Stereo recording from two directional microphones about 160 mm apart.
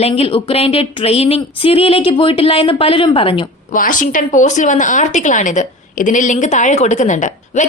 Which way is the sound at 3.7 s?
55° left (ahead or behind).